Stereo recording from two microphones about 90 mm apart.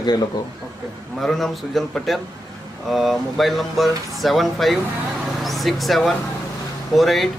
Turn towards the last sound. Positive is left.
turn(degrees=0)  # may be behind; listen again after turning